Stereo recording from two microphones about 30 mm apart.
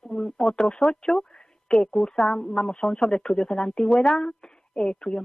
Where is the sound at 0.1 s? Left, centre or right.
Left.